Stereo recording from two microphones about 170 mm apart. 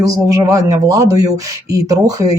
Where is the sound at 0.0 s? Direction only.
20° right (ahead or behind).